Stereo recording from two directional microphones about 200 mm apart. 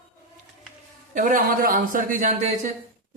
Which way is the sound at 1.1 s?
40° right (ahead or behind).